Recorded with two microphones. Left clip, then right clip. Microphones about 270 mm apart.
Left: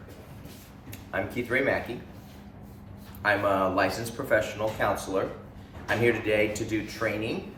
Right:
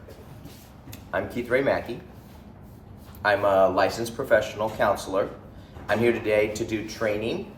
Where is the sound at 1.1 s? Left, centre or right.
Centre.